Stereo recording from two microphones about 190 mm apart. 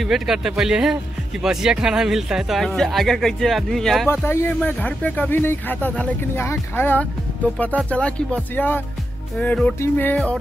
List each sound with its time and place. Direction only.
0.0 s speech: centre (ahead or behind)
4.1 s speech: 10° left (ahead or behind)